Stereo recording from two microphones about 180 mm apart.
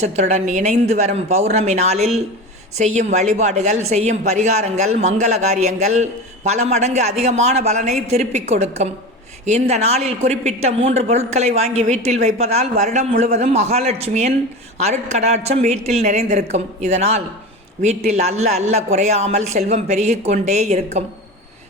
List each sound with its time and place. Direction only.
0.0 s a man's voice: 40° right (ahead or behind)